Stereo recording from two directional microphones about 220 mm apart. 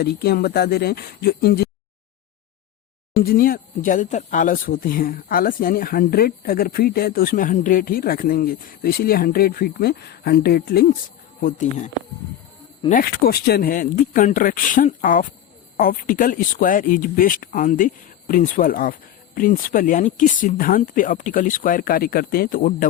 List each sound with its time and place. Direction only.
0.0 s speech: 45° left (ahead or behind)
3.2 s speech: 40° left (ahead or behind)
12.9 s speech: 40° left (ahead or behind)